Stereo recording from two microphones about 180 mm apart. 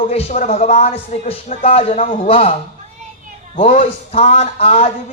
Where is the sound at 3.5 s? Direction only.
40° left (ahead or behind).